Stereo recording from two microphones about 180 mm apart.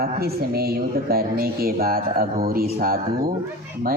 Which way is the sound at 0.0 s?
60° right (ahead or behind).